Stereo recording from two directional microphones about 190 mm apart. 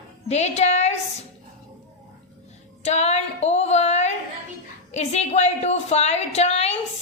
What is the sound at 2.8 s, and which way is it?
A woman's voice, 35° left (ahead or behind).